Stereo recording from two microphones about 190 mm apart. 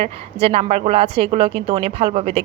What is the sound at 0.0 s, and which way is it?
A woman's voice, 30° right (ahead or behind).